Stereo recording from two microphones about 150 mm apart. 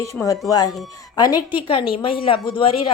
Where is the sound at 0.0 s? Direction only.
20° left (ahead or behind).